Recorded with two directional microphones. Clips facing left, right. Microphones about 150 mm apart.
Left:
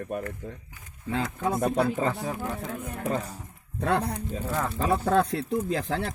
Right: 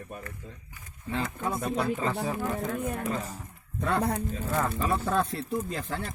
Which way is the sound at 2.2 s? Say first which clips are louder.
Right 1 dB; centre (ahead or behind).